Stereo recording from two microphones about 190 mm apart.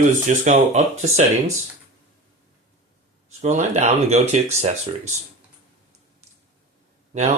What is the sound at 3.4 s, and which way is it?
Speech, 35° right (ahead or behind).